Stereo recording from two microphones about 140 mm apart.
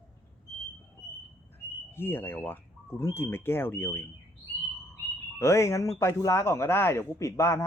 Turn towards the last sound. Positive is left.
turn(degrees=20)  # may be behind; listen again after turning